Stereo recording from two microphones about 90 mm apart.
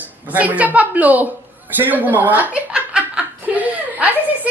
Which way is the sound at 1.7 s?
20° right (ahead or behind).